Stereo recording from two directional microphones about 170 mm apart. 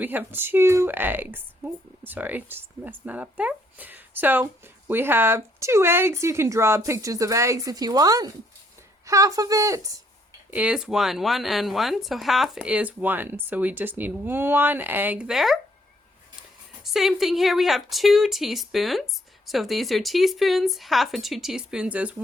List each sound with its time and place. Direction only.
0.0 s a woman's voice: 10° right (ahead or behind)
10.5 s speech: 5° right (ahead or behind)
16.8 s a woman's voice: centre (ahead or behind)